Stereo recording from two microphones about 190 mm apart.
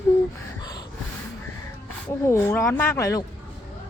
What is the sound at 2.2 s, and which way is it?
Speech, 15° left (ahead or behind).